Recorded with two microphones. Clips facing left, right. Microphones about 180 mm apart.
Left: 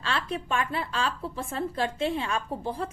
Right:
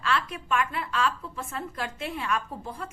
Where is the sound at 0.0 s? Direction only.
30° left (ahead or behind).